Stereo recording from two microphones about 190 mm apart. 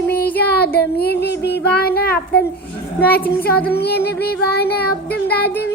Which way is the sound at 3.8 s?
55° left (ahead or behind).